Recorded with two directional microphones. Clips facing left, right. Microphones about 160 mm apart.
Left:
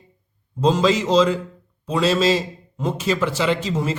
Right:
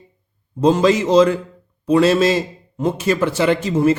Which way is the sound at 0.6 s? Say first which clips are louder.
Right 4 dB; 55° right (ahead or behind).